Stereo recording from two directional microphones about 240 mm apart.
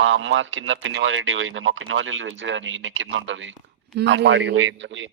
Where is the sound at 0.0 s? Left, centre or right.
Right.